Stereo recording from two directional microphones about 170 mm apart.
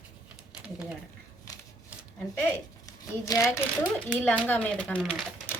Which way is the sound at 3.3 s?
20° left (ahead or behind).